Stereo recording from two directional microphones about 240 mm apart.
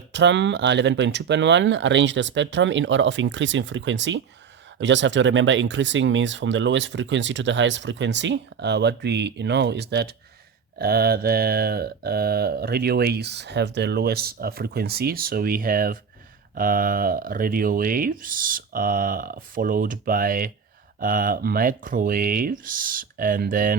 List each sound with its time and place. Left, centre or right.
0.1 s speech: right
10.8 s mantra: right